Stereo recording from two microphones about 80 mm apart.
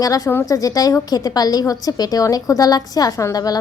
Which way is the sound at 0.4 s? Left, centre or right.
Left.